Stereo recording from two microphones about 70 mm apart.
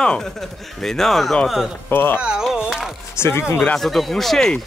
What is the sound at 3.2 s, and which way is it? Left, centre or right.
Speech, left.